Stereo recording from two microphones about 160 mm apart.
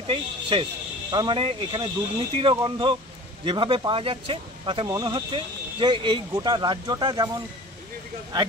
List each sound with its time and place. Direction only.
0.0 s speech: 35° right (ahead or behind)